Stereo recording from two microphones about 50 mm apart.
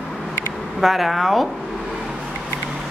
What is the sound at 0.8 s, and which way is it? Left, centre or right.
Speech, centre.